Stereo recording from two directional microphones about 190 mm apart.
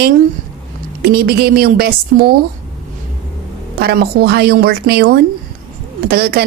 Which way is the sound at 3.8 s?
55° right (ahead or behind).